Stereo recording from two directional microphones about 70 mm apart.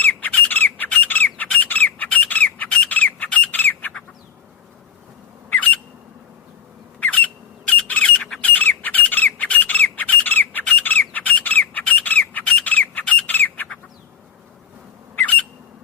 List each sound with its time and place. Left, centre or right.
0.0 s bird: left
5.5 s squawk: left
7.0 s squawk: left
15.1 s squawk: left